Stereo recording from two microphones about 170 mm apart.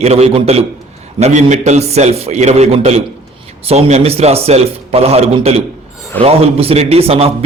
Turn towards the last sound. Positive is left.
turn(degrees=-35)  # may be behind; listen again after turning